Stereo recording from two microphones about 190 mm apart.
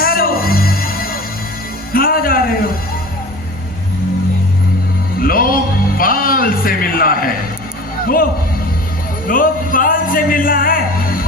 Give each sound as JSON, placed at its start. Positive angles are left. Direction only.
{"t": 0.0, "sound": "music", "side_deg": 50}
{"t": 5.2, "sound": "music", "side_deg": 50}
{"t": 8.0, "sound": "speech", "side_deg": 50}
{"t": 9.2, "sound": "music", "side_deg": 45}